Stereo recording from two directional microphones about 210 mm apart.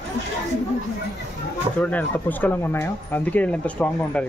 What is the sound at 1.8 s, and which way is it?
Speech, 5° left (ahead or behind).